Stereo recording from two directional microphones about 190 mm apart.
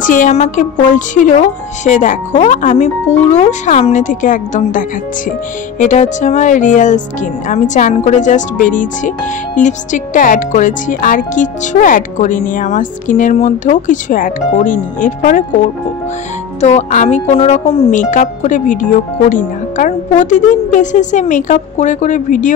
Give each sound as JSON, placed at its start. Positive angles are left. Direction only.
{"t": 0.0, "sound": "speech", "side_deg": 45}
{"t": 16.6, "sound": "speech", "side_deg": 40}
{"t": 17.9, "sound": "speech", "side_deg": 40}